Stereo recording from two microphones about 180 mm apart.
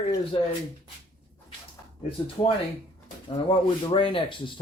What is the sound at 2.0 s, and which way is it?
Speech, 30° left (ahead or behind).